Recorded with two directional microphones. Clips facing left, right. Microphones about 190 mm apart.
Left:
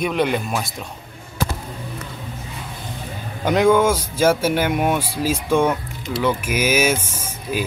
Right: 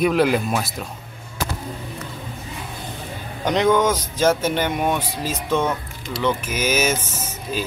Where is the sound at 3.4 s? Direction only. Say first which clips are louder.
Left 2 dB; 10° left (ahead or behind).